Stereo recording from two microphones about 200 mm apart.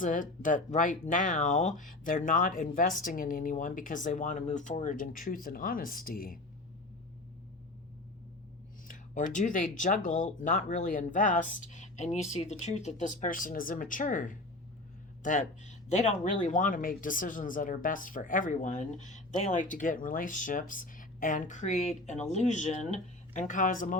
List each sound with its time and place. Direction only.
0.0 s speech: 40° left (ahead or behind)
8.9 s speech: 40° left (ahead or behind)